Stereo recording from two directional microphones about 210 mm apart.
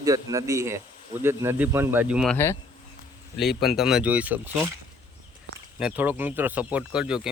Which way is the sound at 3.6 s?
Centre (ahead or behind).